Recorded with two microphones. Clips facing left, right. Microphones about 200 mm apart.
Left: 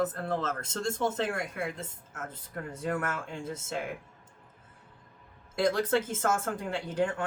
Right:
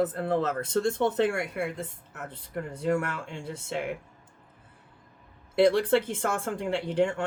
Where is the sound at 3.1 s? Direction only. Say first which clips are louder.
Even; 45° left (ahead or behind).